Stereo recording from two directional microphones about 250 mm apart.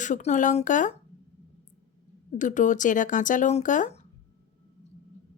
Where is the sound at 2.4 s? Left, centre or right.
Left.